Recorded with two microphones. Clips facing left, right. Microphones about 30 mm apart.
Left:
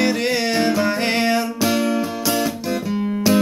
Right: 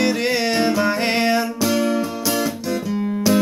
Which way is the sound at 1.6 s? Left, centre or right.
Centre.